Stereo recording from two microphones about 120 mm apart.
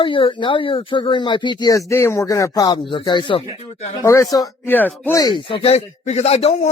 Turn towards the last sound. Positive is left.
turn(degrees=60)  # may be behind; listen again after turning